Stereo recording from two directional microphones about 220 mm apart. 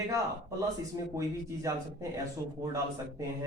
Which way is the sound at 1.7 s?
15° right (ahead or behind).